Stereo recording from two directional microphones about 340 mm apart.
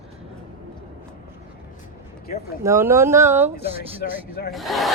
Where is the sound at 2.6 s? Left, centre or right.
Centre.